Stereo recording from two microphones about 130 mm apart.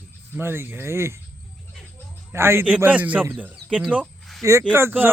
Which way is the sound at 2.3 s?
20° right (ahead or behind).